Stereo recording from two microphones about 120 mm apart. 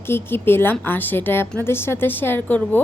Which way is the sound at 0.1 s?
20° left (ahead or behind).